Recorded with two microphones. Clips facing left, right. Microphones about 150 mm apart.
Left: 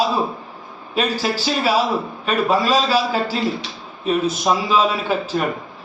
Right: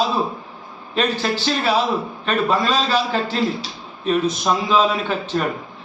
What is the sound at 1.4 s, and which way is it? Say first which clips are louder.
A man's voice: left 1 dB; 5° left (ahead or behind).